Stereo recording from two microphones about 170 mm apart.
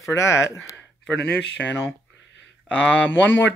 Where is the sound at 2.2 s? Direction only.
90° left.